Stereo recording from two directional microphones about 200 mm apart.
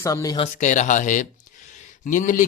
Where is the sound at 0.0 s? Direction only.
15° left (ahead or behind).